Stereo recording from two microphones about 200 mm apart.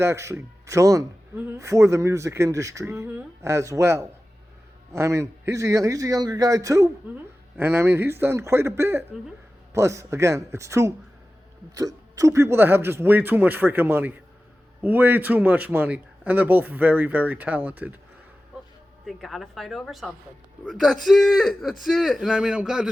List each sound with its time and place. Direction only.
0.0 s speech: 15° right (ahead or behind)
19.0 s a man's voice: centre (ahead or behind)